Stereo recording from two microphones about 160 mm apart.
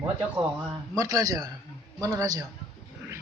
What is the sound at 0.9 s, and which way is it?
A man's voice, 20° right (ahead or behind).